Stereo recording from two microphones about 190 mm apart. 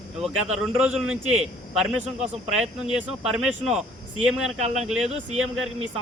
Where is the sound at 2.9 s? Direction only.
5° right (ahead or behind).